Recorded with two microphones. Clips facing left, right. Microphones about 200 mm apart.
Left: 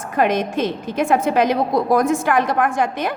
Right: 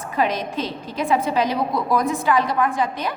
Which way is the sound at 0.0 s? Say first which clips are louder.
Left 4 dB; 50° left (ahead or behind).